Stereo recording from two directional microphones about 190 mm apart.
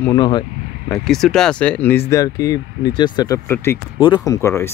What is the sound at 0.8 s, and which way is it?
Speech, centre (ahead or behind).